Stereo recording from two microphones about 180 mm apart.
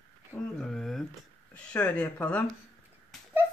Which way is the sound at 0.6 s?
Centre (ahead or behind).